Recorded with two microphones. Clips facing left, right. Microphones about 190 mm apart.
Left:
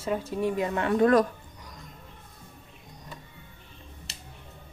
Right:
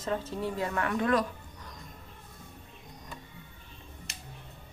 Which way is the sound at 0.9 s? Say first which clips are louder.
Left 8 dB; 40° left (ahead or behind).